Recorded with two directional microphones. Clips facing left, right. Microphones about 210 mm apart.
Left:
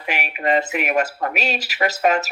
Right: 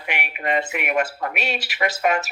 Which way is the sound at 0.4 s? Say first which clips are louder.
Left 4 dB; 35° left (ahead or behind).